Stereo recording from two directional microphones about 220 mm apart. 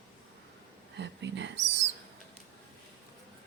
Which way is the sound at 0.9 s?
55° right (ahead or behind).